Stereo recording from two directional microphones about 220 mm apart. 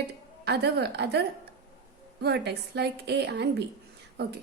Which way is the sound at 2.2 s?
50° right (ahead or behind).